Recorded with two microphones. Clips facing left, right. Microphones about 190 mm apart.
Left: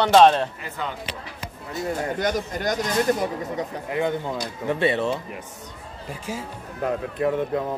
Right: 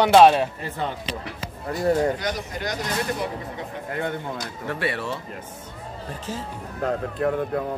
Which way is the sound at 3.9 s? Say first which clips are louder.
Left 3 dB; 15° left (ahead or behind).